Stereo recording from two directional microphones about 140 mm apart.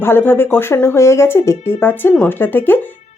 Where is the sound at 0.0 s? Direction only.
15° left (ahead or behind).